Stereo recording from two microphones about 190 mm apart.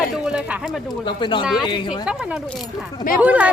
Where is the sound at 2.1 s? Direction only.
5° right (ahead or behind).